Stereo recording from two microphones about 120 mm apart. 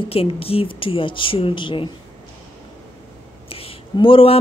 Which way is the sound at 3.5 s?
50° left (ahead or behind).